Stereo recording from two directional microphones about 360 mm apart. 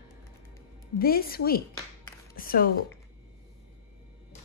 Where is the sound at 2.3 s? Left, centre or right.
Left.